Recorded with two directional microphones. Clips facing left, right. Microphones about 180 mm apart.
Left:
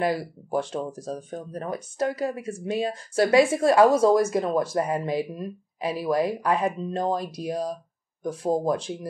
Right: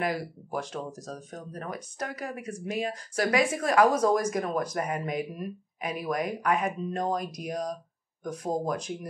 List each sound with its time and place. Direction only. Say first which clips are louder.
0.0 s speech: left 5 dB; 30° left (ahead or behind)